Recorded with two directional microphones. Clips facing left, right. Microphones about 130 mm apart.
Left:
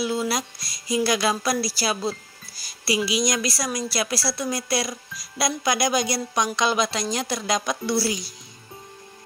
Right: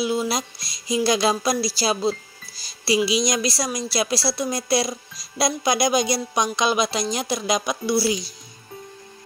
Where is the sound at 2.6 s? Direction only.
25° right (ahead or behind).